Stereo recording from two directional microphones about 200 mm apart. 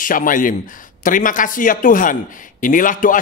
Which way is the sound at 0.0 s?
45° left (ahead or behind).